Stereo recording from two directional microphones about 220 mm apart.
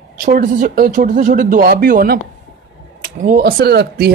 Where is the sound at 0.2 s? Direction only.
40° right (ahead or behind).